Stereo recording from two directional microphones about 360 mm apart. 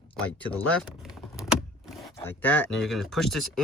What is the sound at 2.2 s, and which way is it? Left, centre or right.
Speech, centre.